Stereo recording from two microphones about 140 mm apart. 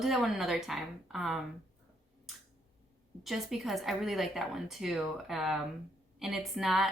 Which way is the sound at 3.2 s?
Centre (ahead or behind).